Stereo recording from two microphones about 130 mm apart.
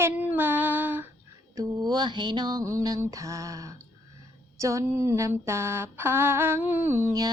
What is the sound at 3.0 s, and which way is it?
Female singing, 25° right (ahead or behind).